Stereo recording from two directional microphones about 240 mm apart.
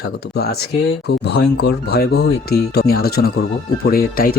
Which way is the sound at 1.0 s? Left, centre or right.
Left.